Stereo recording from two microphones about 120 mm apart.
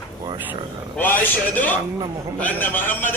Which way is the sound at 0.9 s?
15° left (ahead or behind).